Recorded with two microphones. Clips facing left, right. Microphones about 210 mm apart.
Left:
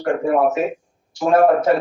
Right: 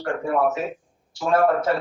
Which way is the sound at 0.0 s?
15° left (ahead or behind).